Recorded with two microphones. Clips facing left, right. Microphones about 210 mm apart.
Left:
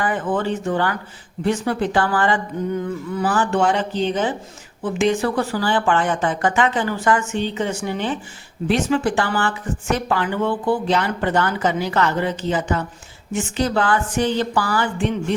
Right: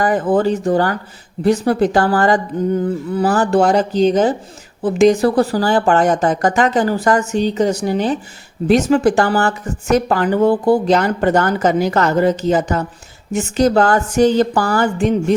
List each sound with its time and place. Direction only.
0.0 s a woman's voice: 40° right (ahead or behind)